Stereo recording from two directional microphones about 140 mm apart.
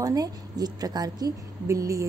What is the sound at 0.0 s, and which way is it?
A woman's voice, 25° right (ahead or behind).